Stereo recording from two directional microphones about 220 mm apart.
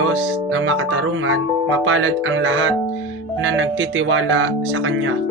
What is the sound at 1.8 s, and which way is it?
Speech, 65° right (ahead or behind).